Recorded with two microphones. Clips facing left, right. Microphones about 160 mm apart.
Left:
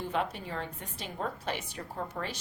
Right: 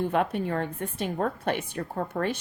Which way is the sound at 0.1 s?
55° right (ahead or behind).